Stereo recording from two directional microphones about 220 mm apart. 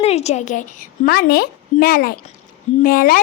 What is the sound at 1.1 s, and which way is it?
A woman's voice, 45° left (ahead or behind).